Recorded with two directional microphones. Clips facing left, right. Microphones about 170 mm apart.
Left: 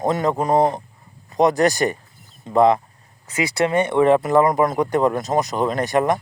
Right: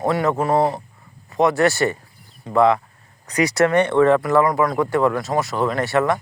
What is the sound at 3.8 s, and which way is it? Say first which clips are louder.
Speech: left 2 dB; 15° left (ahead or behind).